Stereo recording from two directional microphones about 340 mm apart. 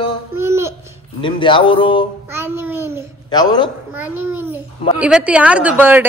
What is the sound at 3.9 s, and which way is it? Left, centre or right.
Speech, left.